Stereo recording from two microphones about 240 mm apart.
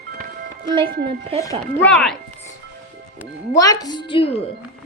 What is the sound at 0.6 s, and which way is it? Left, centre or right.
Speech, centre.